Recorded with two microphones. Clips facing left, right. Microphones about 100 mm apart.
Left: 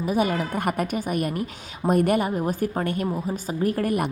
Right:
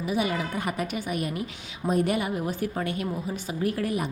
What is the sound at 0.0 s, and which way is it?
A woman's voice, 45° left (ahead or behind).